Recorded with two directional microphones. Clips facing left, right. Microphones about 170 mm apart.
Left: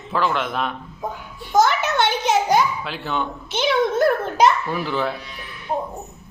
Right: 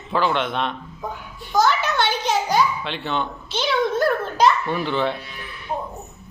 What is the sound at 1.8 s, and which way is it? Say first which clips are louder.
Speech: left 2 dB; 20° left (ahead or behind).